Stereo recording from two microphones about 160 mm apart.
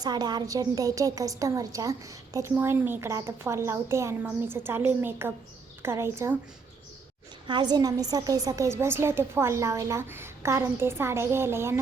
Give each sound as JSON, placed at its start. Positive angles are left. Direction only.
{"t": 0.0, "sound": "a woman's voice", "side_deg": -25}
{"t": 7.4, "sound": "a woman's voice", "side_deg": -30}